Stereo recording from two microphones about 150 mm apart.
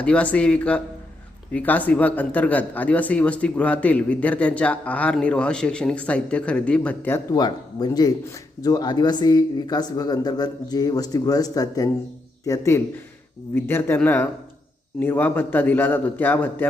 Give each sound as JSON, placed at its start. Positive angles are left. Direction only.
{"t": 0.0, "sound": "speech", "side_deg": 10}
{"t": 7.3, "sound": "speech", "side_deg": 25}